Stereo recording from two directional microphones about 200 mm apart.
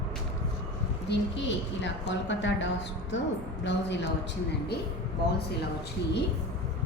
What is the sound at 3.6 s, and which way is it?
Speech, 65° left (ahead or behind).